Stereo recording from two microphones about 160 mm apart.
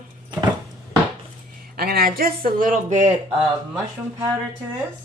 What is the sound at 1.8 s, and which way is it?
Speech, 70° right (ahead or behind).